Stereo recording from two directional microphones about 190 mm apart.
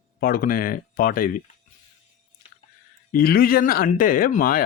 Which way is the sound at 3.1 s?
50° left (ahead or behind).